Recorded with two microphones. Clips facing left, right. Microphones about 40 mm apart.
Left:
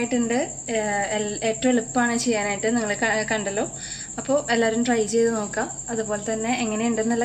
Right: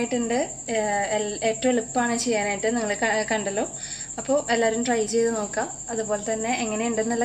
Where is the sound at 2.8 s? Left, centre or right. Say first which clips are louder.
Left 1 dB; left.